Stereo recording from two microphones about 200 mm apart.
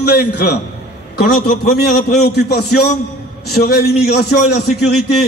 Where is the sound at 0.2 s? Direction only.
55° left (ahead or behind).